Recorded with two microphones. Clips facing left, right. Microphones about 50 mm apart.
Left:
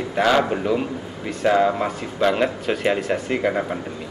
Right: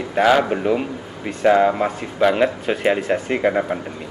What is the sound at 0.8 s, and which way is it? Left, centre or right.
Speech, centre.